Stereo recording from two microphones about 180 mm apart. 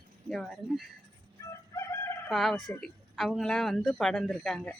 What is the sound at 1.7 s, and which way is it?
Crowing, 15° left (ahead or behind).